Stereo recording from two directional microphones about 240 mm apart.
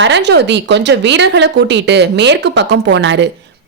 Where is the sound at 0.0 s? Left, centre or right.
Right.